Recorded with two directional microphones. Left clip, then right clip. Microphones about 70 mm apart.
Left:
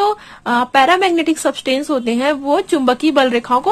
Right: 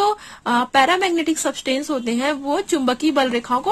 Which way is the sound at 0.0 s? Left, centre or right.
Right.